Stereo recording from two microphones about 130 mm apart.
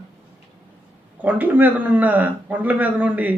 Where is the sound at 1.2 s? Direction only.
10° right (ahead or behind).